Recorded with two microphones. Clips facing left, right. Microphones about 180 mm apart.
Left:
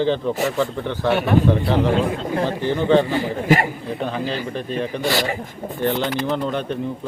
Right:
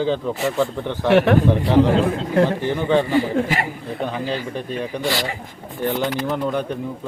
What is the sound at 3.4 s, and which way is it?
Speech, 45° left (ahead or behind).